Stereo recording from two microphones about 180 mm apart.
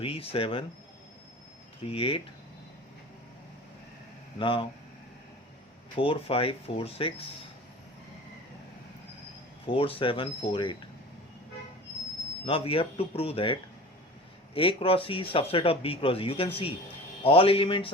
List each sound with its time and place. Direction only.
0.0 s speech: 30° left (ahead or behind)
1.8 s speech: 30° left (ahead or behind)
4.4 s speech: 30° left (ahead or behind)
6.0 s speech: 30° left (ahead or behind)
9.6 s speech: 30° left (ahead or behind)
12.5 s speech: 30° left (ahead or behind)